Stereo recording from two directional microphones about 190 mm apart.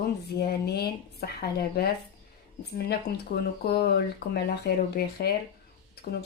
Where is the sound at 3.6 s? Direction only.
55° left (ahead or behind).